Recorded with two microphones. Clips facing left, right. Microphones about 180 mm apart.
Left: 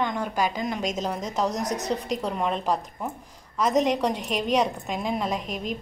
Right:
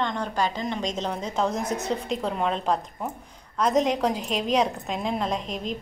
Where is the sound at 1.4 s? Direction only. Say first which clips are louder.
Even; 40° left (ahead or behind).